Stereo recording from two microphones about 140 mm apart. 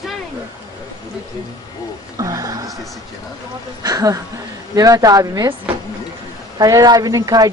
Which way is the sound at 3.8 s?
25° right (ahead or behind).